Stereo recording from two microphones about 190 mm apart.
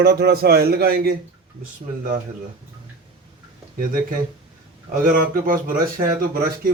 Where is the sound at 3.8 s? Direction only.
50° right (ahead or behind).